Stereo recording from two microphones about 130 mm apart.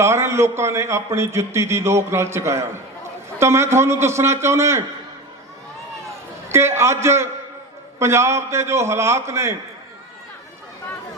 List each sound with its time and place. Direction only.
0.0 s a man's voice: 20° right (ahead or behind)
6.5 s a man's voice: 20° right (ahead or behind)